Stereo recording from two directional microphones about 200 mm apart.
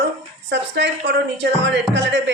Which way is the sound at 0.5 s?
60° right (ahead or behind).